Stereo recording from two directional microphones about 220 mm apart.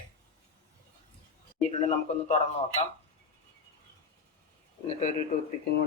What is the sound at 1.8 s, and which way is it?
Speech, 30° left (ahead or behind).